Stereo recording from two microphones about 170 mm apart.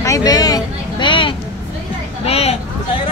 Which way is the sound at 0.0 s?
20° left (ahead or behind).